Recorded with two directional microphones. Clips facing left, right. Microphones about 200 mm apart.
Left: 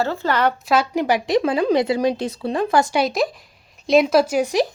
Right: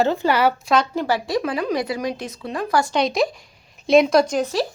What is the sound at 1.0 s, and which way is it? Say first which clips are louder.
A woman's voice: left 4 dB; 20° left (ahead or behind).